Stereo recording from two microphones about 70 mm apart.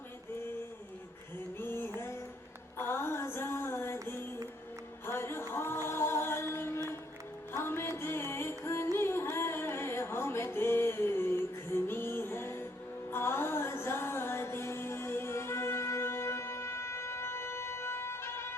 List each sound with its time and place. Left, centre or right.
1.5 s music: left
5.0 s music: left
9.3 s a sound: left
13.1 s music: left